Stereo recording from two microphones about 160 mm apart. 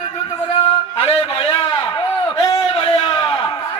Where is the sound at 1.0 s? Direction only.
40° left (ahead or behind).